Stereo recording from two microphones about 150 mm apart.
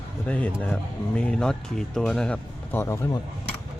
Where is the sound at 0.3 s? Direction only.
10° left (ahead or behind).